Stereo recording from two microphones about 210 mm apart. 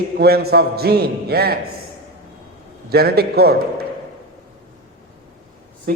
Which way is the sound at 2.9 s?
50° right (ahead or behind).